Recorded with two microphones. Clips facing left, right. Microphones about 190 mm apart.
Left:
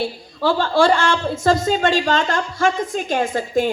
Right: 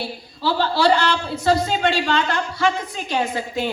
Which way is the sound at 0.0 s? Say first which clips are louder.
Left 4 dB; 50° left (ahead or behind).